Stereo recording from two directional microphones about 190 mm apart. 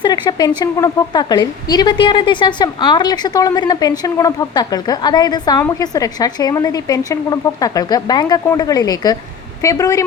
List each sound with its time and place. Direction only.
0.0 s a woman's voice: 20° left (ahead or behind)